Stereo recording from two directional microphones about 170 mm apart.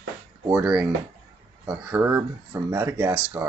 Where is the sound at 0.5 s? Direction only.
5° right (ahead or behind).